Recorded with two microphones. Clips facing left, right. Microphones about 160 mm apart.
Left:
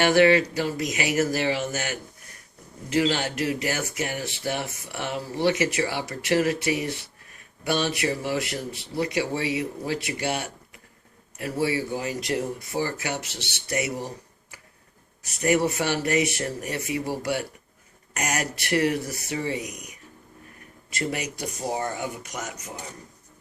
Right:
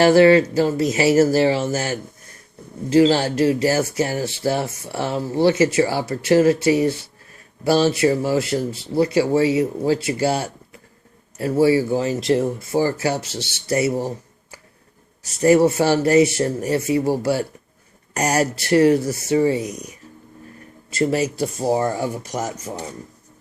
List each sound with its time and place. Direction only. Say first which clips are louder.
0.0 s speech: right 6 dB; 35° right (ahead or behind)
15.2 s speech: right 8 dB; 30° right (ahead or behind)